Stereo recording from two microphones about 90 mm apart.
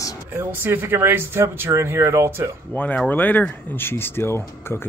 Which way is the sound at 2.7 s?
20° left (ahead or behind).